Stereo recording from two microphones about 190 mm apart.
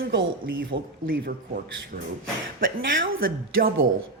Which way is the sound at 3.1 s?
50° right (ahead or behind).